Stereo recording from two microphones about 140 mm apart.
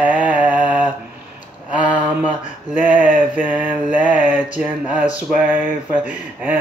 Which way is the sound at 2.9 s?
75° right (ahead or behind).